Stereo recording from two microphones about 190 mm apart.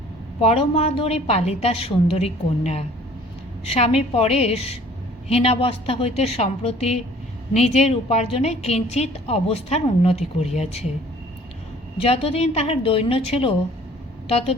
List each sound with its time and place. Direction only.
0.4 s a woman's voice: 35° left (ahead or behind)
12.0 s a woman's voice: 30° left (ahead or behind)